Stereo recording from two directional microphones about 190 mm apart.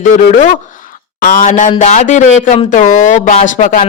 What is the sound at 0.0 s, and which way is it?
A man's voice, 40° left (ahead or behind).